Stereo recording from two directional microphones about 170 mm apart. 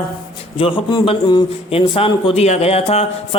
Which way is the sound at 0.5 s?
25° left (ahead or behind).